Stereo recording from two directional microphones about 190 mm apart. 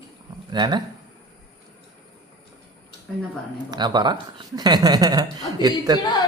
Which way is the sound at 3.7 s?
20° right (ahead or behind).